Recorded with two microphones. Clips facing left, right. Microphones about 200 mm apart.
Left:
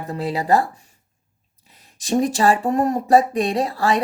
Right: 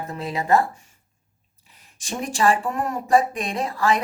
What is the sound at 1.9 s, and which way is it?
Speech, 35° left (ahead or behind).